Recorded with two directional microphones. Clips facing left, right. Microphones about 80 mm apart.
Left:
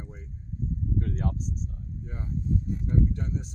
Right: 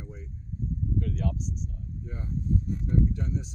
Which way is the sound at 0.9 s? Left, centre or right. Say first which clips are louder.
Even; left.